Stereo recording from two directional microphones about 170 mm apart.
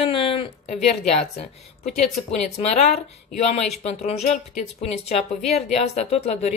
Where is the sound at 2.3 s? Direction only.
40° left (ahead or behind).